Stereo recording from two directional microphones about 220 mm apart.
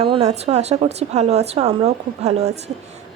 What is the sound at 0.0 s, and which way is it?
A woman's voice, 25° right (ahead or behind).